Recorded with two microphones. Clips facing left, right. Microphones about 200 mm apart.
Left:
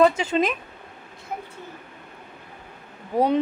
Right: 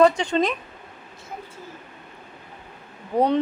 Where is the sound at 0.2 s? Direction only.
5° left (ahead or behind).